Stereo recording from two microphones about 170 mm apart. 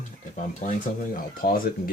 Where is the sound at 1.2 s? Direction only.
60° left (ahead or behind).